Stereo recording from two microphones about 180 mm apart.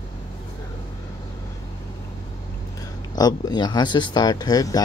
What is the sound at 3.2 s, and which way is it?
Speech, 20° left (ahead or behind).